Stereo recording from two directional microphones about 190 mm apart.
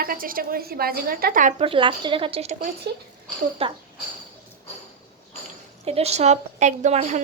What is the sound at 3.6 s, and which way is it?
Speech, 30° right (ahead or behind).